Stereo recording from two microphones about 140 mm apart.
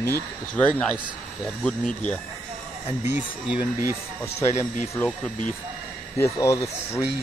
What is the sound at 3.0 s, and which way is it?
Speech, 10° right (ahead or behind).